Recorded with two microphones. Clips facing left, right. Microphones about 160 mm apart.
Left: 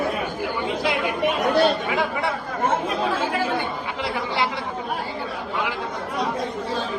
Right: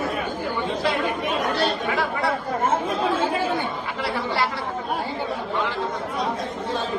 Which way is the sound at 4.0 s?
20° left (ahead or behind).